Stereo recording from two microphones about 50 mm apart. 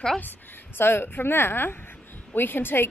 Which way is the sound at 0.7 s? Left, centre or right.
Left.